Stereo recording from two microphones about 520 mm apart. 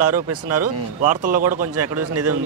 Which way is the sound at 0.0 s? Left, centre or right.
Right.